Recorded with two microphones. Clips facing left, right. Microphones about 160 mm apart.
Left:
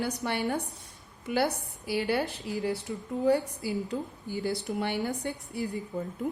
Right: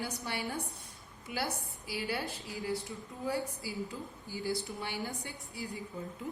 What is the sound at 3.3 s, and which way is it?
A woman's voice, 65° left (ahead or behind).